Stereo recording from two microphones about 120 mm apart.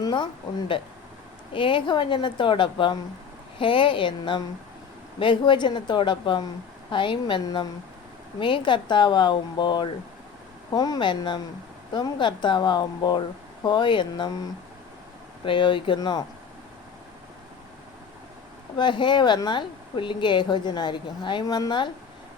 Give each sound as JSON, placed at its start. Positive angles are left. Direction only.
{"t": 0.0, "sound": "a sound", "side_deg": 40}
{"t": 1.5, "sound": "a woman's voice", "side_deg": 45}
{"t": 15.4, "sound": "a woman's voice", "side_deg": 45}
{"t": 18.8, "sound": "speech", "side_deg": 40}